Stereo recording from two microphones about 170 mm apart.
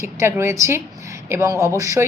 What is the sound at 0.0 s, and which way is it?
A woman's voice, 15° right (ahead or behind).